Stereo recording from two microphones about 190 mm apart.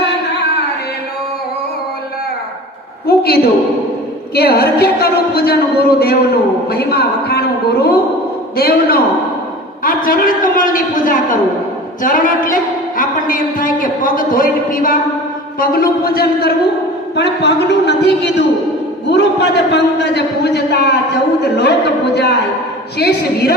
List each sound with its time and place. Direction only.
3.1 s a man's voice: 55° left (ahead or behind)